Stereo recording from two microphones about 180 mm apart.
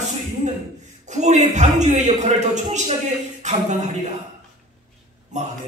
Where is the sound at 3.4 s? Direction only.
40° right (ahead or behind).